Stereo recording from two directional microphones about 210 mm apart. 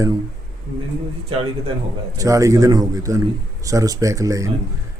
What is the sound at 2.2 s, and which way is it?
Speech, 15° right (ahead or behind).